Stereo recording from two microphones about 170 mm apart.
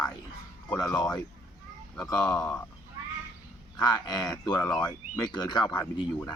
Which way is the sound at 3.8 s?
25° left (ahead or behind).